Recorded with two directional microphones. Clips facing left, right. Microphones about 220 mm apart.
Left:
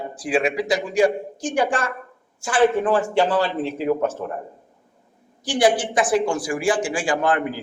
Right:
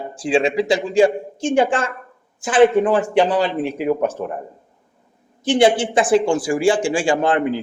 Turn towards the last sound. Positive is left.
turn(degrees=-25)  # may be behind; listen again after turning